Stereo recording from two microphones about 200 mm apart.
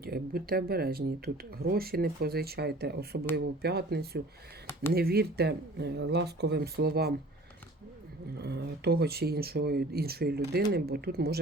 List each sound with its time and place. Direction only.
0.0 s speech: 50° right (ahead or behind)
8.4 s speech: 55° right (ahead or behind)